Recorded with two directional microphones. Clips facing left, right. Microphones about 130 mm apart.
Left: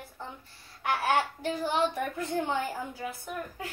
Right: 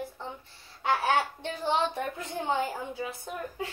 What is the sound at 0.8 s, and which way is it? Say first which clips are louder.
A child's voice: right 1 dB; 25° right (ahead or behind).